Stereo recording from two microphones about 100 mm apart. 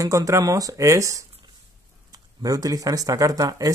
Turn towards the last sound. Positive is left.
turn(degrees=-40)  # may be behind; listen again after turning